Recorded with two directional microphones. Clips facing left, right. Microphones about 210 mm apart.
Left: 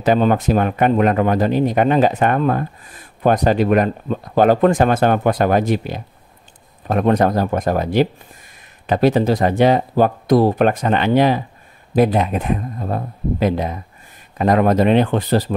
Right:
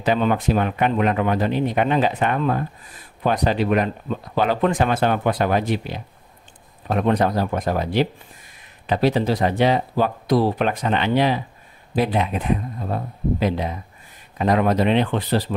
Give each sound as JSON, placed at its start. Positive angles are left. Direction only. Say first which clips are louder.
{"t": 0.0, "sound": "speech", "louder": "left 4 dB", "side_deg": 45}